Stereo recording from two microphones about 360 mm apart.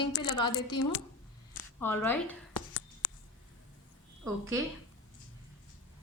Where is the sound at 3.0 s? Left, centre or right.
Left.